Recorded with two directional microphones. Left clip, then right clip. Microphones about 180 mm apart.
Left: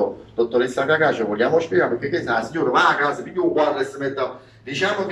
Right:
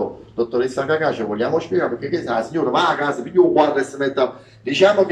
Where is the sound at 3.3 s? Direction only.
55° right (ahead or behind).